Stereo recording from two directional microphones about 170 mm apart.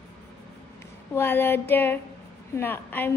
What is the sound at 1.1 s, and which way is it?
A woman's voice, 15° left (ahead or behind).